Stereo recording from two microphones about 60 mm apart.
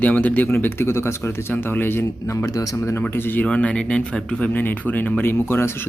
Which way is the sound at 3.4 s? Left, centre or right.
Centre.